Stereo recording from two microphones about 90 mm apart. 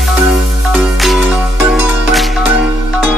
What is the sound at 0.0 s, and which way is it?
Music, centre (ahead or behind).